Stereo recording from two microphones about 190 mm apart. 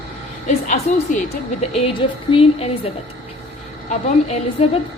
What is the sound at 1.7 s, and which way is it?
Speech, 30° left (ahead or behind).